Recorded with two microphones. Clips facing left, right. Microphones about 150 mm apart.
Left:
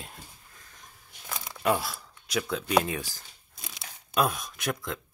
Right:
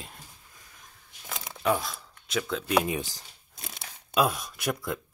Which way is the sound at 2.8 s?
20° right (ahead or behind).